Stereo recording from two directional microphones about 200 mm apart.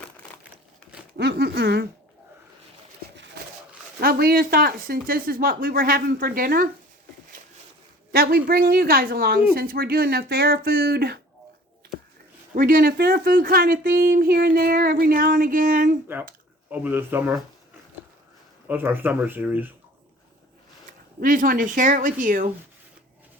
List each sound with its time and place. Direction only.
1.1 s speech: 55° right (ahead or behind)
4.0 s speech: 45° right (ahead or behind)
8.1 s speech: 50° right (ahead or behind)
12.5 s speech: 45° right (ahead or behind)
16.6 s speech: 10° right (ahead or behind)
18.7 s speech: 10° right (ahead or behind)
21.2 s speech: 45° right (ahead or behind)